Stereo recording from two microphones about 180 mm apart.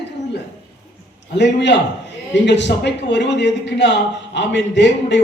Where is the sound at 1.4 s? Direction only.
75° left (ahead or behind).